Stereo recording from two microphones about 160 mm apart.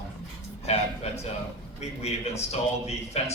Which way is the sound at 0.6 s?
40° left (ahead or behind).